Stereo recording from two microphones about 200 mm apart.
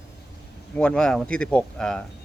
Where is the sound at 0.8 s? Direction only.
5° left (ahead or behind).